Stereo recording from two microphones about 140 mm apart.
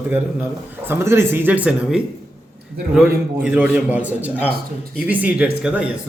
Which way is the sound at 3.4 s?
10° right (ahead or behind).